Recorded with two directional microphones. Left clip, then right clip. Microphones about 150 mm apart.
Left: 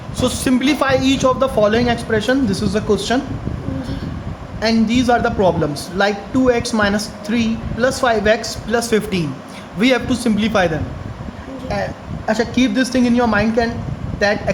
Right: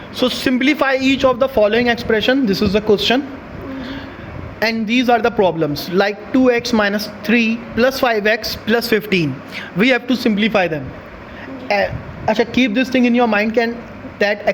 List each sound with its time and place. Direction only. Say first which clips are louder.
0.2 s speech: right 1 dB; 35° right (ahead or behind)
4.6 s a man's voice: even; 45° right (ahead or behind)
11.7 s a man's voice: right 6 dB; 50° right (ahead or behind)